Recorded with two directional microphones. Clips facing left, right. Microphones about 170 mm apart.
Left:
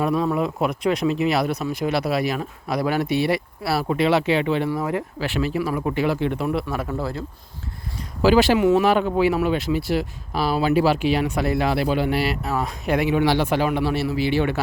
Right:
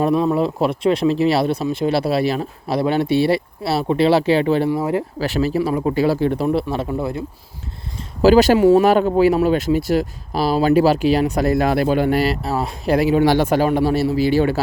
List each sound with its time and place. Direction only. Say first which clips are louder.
0.1 s speech: right 4 dB; 25° right (ahead or behind)
6.8 s speech: right 4 dB; 15° right (ahead or behind)
8.2 s speech: right 5 dB; 40° right (ahead or behind)